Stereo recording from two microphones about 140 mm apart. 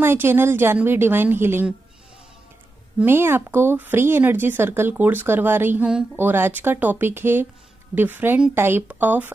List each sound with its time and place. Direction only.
0.0 s speech: 15° right (ahead or behind)
3.0 s speech: 15° right (ahead or behind)